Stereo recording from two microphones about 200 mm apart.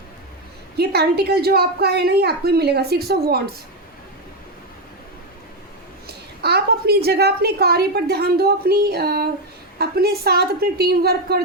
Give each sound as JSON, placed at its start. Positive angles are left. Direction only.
{"t": 0.8, "sound": "a woman's voice", "side_deg": -55}
{"t": 6.1, "sound": "a woman's voice", "side_deg": -55}